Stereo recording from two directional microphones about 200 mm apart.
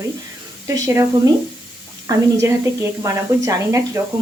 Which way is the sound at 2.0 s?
15° right (ahead or behind).